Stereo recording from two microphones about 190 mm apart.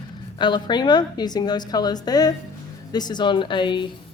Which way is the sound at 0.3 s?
25° left (ahead or behind).